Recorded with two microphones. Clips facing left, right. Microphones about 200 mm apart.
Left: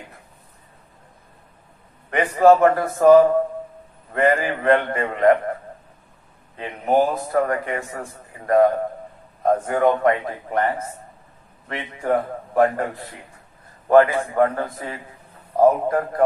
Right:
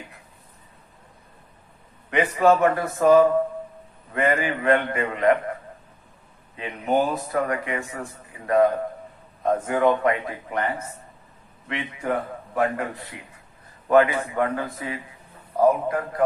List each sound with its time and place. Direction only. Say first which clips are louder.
2.0 s a man's voice: left 4 dB; 40° left (ahead or behind)
6.6 s a man's voice: left 3 dB; 45° left (ahead or behind)
13.8 s speech: left 3 dB; 40° left (ahead or behind)